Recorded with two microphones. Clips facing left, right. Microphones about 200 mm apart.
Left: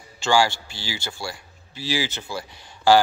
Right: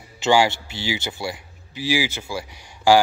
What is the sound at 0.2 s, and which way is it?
A man's voice, 20° right (ahead or behind).